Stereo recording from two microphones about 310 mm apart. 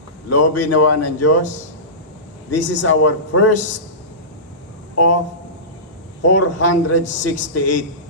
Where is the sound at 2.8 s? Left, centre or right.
Left.